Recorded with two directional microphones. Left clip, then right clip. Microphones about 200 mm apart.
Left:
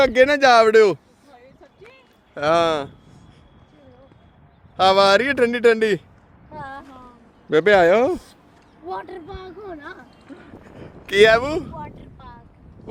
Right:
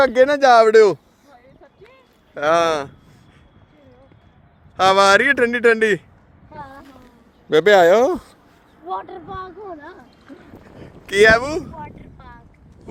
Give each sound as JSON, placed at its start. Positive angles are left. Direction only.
{"t": 0.0, "sound": "speech", "side_deg": 0}
{"t": 2.3, "sound": "speech", "side_deg": -10}
{"t": 4.8, "sound": "speech", "side_deg": -10}
{"t": 6.6, "sound": "a sound", "side_deg": 25}
{"t": 7.5, "sound": "speech", "side_deg": -30}
{"t": 8.9, "sound": "speech", "side_deg": 15}
{"t": 10.4, "sound": "boat", "side_deg": 0}
{"t": 12.8, "sound": "oink", "side_deg": -10}